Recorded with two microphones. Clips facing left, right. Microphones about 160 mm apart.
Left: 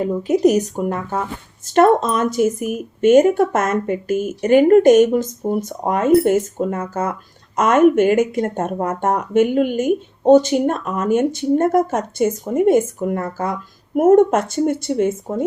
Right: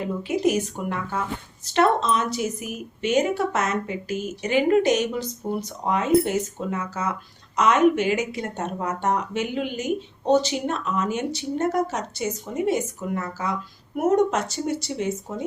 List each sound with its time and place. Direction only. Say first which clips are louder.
0.0 s speech: left 8 dB; 40° left (ahead or behind)